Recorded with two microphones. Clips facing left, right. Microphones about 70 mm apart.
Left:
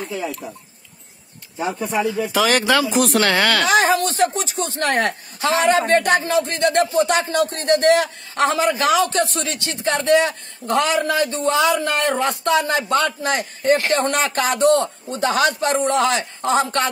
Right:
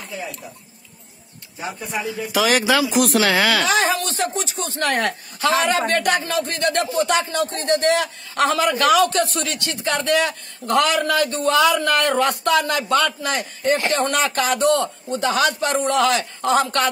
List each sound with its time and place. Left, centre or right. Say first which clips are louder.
2.3 s speech: even; centre
3.6 s a man's voice: left 3 dB; left